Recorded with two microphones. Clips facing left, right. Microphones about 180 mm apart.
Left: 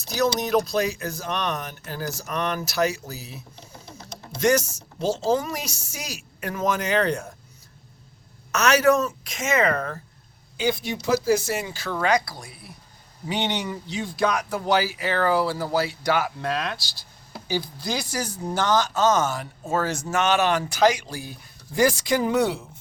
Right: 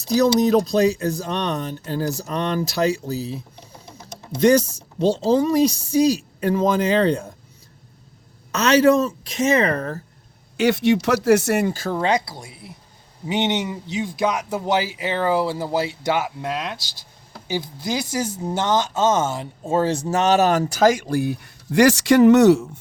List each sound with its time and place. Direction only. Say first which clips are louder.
0.1 s speech: right 6 dB; 35° right (ahead or behind)
8.5 s speech: right 4 dB; 30° right (ahead or behind)
10.6 s speech: right 8 dB; 75° right (ahead or behind); by 11.9 s 45° right (ahead or behind)
11.9 s speech: left 2 dB; 25° right (ahead or behind); by 22.7 s 75° right (ahead or behind)